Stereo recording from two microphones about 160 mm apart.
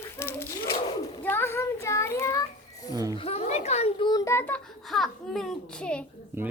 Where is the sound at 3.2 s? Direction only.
40° left (ahead or behind); by 4.5 s 15° left (ahead or behind).